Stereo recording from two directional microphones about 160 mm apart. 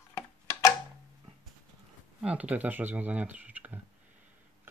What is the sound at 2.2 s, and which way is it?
Speech, 10° right (ahead or behind).